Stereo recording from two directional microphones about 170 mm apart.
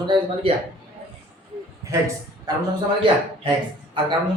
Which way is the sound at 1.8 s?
20° right (ahead or behind).